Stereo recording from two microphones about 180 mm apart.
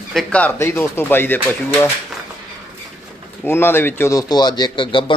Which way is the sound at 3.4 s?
10° left (ahead or behind).